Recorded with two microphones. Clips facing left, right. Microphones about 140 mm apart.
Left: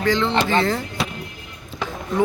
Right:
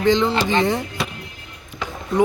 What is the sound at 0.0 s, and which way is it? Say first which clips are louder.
Speech: right 2 dB; 20° right (ahead or behind).